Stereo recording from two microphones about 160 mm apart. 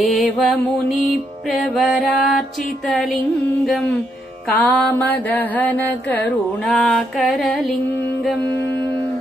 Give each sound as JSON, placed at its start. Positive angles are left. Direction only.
{"t": 0.1, "sound": "music", "side_deg": 0}
{"t": 4.6, "sound": "mantra", "side_deg": 10}